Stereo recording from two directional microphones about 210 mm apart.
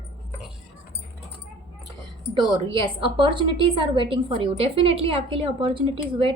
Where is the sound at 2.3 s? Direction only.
25° right (ahead or behind).